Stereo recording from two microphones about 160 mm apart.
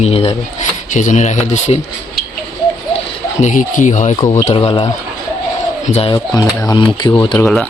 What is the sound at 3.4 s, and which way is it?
Speech, 50° left (ahead or behind).